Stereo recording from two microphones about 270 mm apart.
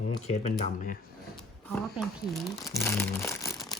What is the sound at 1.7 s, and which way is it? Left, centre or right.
Speech, centre.